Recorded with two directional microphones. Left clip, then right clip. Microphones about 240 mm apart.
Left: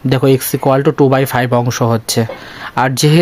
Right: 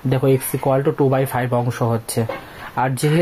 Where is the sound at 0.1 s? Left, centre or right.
Left.